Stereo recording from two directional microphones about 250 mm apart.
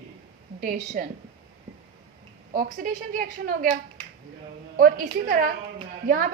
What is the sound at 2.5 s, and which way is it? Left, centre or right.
A woman's voice, right.